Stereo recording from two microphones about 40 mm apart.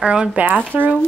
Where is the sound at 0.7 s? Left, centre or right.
Right.